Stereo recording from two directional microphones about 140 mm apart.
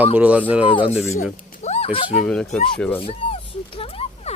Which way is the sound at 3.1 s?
40° left (ahead or behind).